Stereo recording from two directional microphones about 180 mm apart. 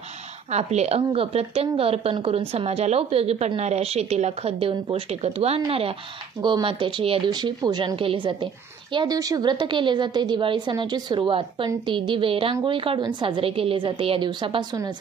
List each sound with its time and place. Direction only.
0.5 s a woman's voice: 40° right (ahead or behind); by 14.9 s 25° right (ahead or behind)